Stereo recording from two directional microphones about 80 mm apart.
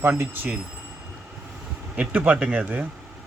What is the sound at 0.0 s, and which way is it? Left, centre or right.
Speech, right.